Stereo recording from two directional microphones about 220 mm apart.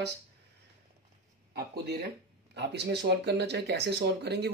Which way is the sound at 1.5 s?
45° right (ahead or behind).